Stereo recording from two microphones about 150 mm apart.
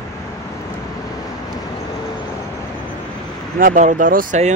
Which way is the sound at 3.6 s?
55° right (ahead or behind).